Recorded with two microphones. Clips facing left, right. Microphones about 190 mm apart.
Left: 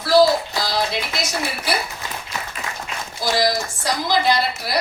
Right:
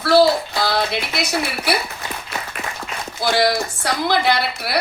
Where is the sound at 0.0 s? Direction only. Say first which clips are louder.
Right 1 dB; 60° right (ahead or behind).